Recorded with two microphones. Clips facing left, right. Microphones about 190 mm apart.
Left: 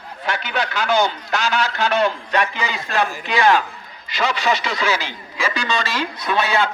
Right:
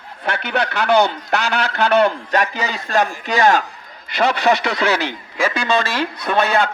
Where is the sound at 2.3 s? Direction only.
40° right (ahead or behind).